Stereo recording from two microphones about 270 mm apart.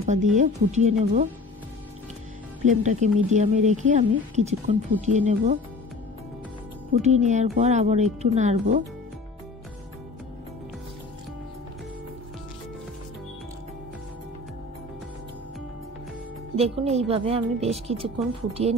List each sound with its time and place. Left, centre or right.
0.0 s speech: right
2.6 s speech: right
7.0 s speech: right
16.5 s speech: right